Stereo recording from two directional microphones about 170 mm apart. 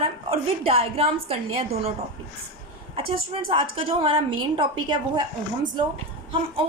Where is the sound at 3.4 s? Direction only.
30° right (ahead or behind).